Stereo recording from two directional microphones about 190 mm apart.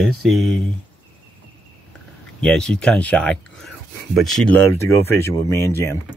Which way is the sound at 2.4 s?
5° left (ahead or behind).